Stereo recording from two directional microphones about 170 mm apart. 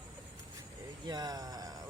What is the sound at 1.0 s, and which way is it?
Speech, 25° right (ahead or behind).